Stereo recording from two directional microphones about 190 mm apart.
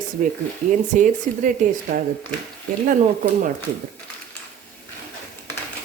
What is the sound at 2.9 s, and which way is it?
Speech, 45° right (ahead or behind).